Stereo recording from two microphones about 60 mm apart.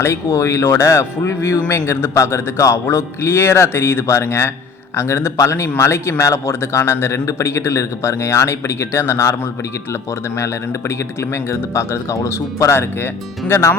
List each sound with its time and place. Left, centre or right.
0.0 s speech: left
2.1 s speech: left
2.8 s speech: left